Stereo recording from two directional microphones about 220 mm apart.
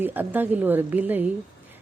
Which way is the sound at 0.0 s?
10° right (ahead or behind).